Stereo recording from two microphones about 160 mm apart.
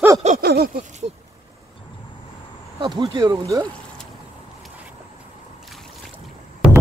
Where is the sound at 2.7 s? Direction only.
30° right (ahead or behind).